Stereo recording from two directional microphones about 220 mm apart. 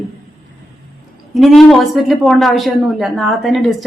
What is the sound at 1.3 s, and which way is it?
A woman's voice, centre (ahead or behind).